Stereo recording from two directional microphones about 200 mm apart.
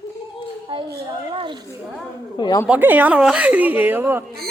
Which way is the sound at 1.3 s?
25° right (ahead or behind).